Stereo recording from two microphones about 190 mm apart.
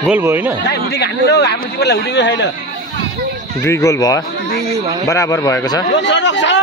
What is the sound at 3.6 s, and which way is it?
Speech, 15° left (ahead or behind).